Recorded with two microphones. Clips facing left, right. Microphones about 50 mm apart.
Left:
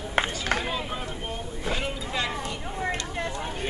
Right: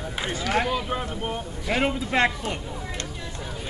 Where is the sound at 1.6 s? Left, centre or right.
Right.